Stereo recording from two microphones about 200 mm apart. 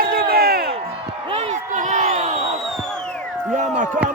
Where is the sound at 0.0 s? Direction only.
45° right (ahead or behind).